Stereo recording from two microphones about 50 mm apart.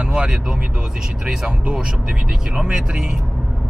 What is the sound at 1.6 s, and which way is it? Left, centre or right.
Speech, centre.